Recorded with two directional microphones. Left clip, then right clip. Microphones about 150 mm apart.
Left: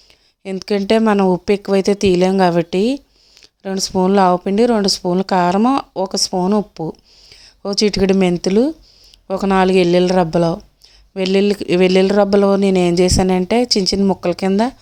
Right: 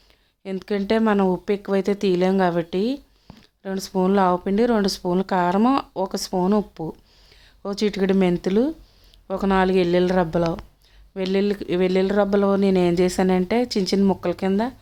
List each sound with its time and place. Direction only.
0.9 s speech: 35° left (ahead or behind)